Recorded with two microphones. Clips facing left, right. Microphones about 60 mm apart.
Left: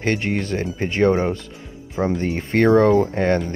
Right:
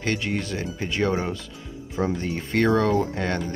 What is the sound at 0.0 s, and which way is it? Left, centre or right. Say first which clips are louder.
Speech: left 4 dB; left.